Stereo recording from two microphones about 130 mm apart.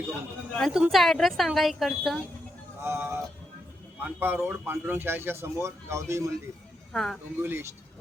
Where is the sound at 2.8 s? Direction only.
15° right (ahead or behind).